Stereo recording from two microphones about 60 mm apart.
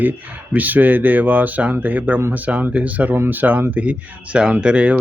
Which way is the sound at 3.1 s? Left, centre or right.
Right.